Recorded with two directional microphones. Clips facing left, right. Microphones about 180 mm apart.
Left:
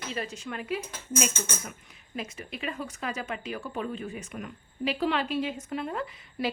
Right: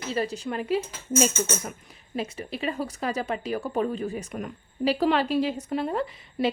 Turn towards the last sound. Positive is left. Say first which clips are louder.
# right 5 dB
turn(degrees=-30)  # may be behind; listen again after turning